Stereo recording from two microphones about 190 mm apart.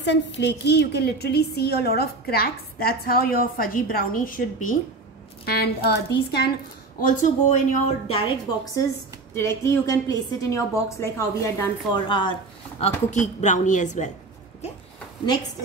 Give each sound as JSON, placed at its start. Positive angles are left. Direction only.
{"t": 0.0, "sound": "a woman's voice", "side_deg": 65}
{"t": 5.4, "sound": "speech", "side_deg": 55}
{"t": 7.0, "sound": "a woman's voice", "side_deg": 40}
{"t": 8.8, "sound": "a woman's voice", "side_deg": 15}